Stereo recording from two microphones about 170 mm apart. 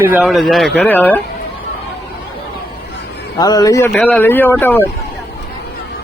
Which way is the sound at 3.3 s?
20° left (ahead or behind).